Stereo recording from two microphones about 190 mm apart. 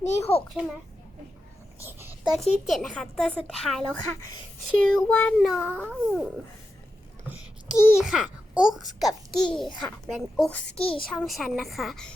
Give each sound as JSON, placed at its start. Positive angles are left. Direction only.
{"t": 0.0, "sound": "a child's voice", "side_deg": 35}
{"t": 1.8, "sound": "a child's voice", "side_deg": -10}
{"t": 4.9, "sound": "a child's voice", "side_deg": 5}
{"t": 10.8, "sound": "a child's voice", "side_deg": 30}
{"t": 11.0, "sound": "a child's voice", "side_deg": 5}